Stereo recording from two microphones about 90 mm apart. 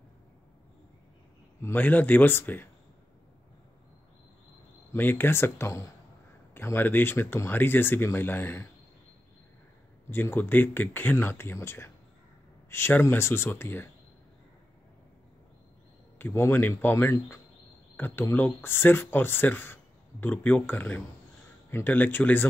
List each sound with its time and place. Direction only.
1.6 s speech: 20° left (ahead or behind)
4.9 s speech: 25° left (ahead or behind)
10.0 s speech: 20° left (ahead or behind)
16.2 s speech: 25° left (ahead or behind)